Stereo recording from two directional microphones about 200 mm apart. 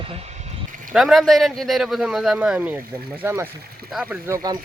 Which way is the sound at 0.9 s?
Centre (ahead or behind).